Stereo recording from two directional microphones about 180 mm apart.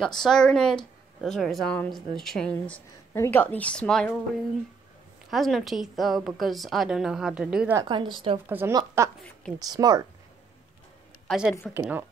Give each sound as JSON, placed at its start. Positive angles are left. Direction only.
{"t": 0.2, "sound": "speech", "side_deg": 5}
{"t": 5.3, "sound": "speech", "side_deg": 0}
{"t": 7.7, "sound": "a woman's voice", "side_deg": -25}
{"t": 8.5, "sound": "a woman's voice", "side_deg": -10}
{"t": 11.2, "sound": "speech", "side_deg": -5}